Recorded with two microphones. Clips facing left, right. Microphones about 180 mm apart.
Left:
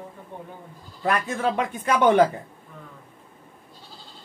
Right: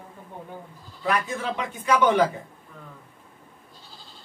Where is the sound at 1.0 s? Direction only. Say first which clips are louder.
Left 2 dB; 50° left (ahead or behind).